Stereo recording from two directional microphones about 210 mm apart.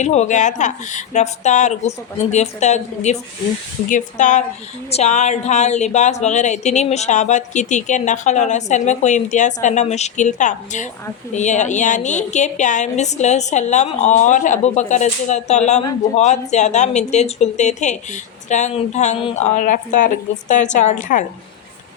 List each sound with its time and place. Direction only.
0.0 s speech: 35° left (ahead or behind)